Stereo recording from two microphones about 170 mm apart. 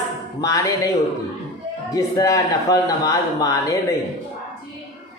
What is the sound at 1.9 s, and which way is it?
A man's voice, 20° left (ahead or behind).